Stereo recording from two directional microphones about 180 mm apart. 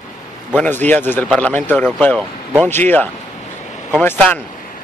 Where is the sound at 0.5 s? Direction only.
10° left (ahead or behind).